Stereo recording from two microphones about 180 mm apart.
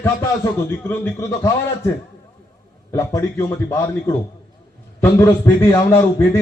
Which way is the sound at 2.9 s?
15° left (ahead or behind).